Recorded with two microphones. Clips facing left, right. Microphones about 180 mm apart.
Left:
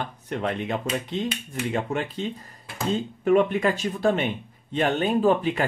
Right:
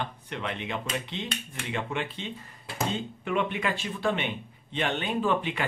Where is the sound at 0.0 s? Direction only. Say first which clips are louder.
Left 6 dB; 45° left (ahead or behind).